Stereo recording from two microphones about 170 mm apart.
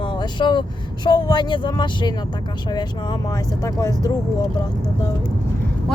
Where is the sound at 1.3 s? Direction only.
25° left (ahead or behind).